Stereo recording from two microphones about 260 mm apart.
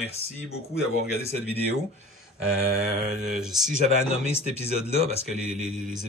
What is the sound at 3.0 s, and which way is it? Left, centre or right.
Speech, centre.